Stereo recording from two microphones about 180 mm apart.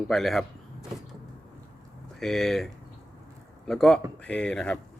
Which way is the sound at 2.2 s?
Centre (ahead or behind).